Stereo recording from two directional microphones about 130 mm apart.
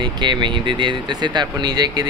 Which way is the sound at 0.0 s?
35° right (ahead or behind).